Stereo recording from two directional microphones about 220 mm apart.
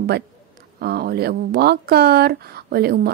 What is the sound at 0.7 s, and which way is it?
Speech, 45° right (ahead or behind).